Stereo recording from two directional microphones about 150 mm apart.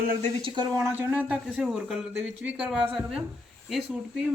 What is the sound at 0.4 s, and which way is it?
Speech, 30° right (ahead or behind).